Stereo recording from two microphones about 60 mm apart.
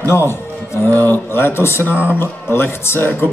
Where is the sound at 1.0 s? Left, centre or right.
Left.